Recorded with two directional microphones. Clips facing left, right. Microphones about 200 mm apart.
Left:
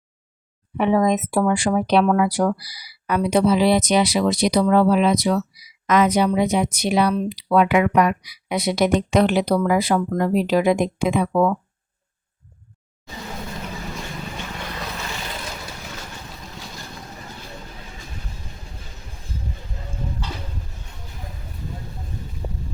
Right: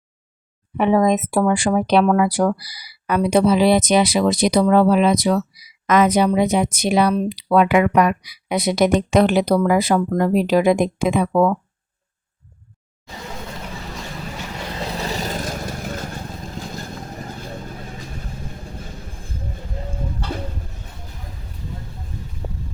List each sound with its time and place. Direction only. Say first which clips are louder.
0.8 s speech: right 2 dB; 50° right (ahead or behind)
14.7 s vehicle: right 5 dB; 30° right (ahead or behind); by 17.6 s 45° right (ahead or behind)